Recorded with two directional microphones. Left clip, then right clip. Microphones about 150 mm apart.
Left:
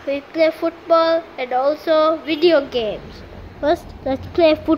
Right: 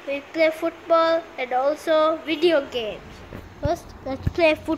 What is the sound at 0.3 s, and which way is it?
A woman's voice, 5° left (ahead or behind).